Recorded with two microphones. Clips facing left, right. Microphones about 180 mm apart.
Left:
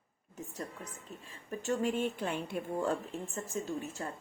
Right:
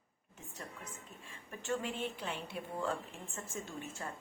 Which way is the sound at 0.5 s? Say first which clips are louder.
Left 4 dB; 35° left (ahead or behind).